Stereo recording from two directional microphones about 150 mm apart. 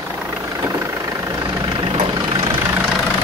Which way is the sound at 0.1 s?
15° right (ahead or behind).